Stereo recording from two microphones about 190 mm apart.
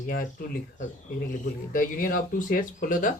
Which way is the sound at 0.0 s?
45° left (ahead or behind).